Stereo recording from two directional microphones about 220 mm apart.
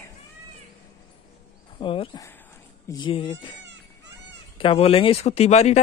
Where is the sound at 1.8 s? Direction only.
25° left (ahead or behind).